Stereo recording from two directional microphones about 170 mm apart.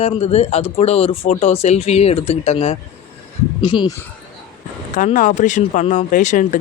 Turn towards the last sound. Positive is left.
turn(degrees=50)  # may be behind; listen again after turning